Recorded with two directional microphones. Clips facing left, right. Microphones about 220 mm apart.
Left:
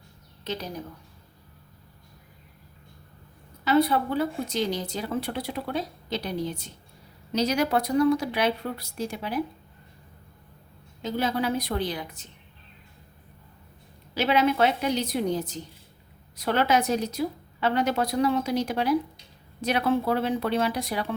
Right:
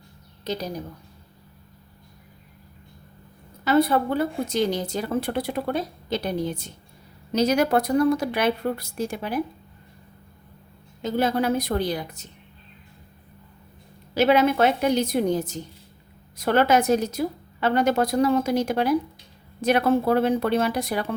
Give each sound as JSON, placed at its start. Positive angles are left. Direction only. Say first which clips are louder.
{"t": 0.4, "sound": "a woman's voice", "louder": "right 4 dB", "side_deg": -40}
{"t": 3.6, "sound": "a woman's voice", "louder": "right 2 dB", "side_deg": -45}
{"t": 11.0, "sound": "a woman's voice", "louder": "right 4 dB", "side_deg": -50}
{"t": 14.1, "sound": "a woman's voice", "louder": "right 4 dB", "side_deg": -50}